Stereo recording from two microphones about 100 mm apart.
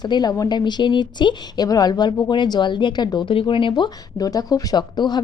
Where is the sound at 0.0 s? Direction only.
45° left (ahead or behind).